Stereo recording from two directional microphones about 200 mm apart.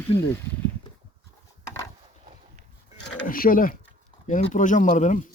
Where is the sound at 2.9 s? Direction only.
60° left (ahead or behind).